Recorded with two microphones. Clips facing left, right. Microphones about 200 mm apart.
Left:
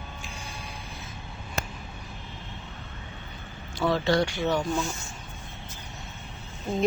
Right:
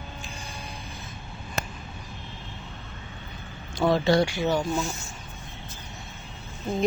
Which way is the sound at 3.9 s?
15° right (ahead or behind).